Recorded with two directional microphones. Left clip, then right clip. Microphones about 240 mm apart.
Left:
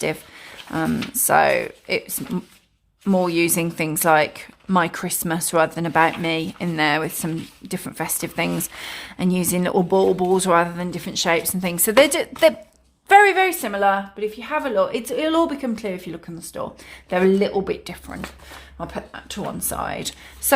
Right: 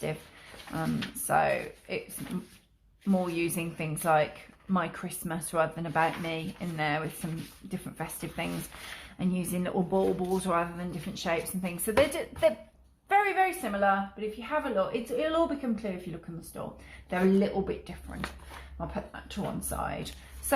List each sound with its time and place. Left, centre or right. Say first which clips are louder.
1.3 s speech: left 10 dB; left
3.0 s speech: left 11 dB; left